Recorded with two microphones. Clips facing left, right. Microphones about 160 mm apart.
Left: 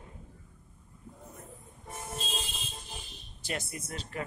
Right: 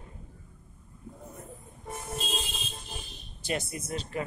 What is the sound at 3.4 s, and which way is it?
Speech, 20° right (ahead or behind).